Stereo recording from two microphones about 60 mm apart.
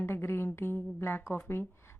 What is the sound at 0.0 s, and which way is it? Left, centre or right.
A woman's voice, left.